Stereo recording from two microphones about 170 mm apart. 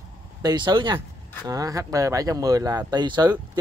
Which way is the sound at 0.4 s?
25° right (ahead or behind).